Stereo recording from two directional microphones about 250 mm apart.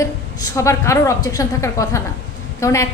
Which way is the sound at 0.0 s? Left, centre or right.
Centre.